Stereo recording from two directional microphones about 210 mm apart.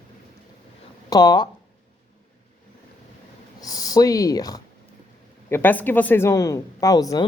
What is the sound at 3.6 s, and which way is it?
Speech, 15° left (ahead or behind).